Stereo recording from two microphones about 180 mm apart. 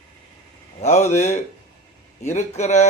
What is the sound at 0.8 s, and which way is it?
A man's voice, 40° left (ahead or behind).